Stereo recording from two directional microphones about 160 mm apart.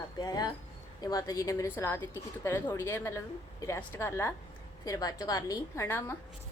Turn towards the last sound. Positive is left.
turn(degrees=15)  # may be behind; listen again after turning